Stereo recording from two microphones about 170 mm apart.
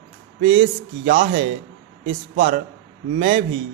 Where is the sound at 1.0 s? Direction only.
40° right (ahead or behind).